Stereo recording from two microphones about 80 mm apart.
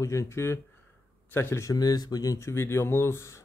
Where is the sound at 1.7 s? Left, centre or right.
Left.